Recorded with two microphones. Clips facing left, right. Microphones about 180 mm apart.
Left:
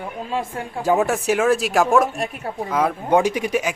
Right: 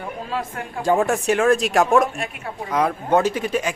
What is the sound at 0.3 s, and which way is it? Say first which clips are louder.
Speech: left 3 dB; 25° left (ahead or behind).